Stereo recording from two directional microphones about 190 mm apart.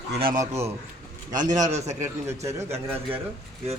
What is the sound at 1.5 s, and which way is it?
A man's voice, 20° right (ahead or behind).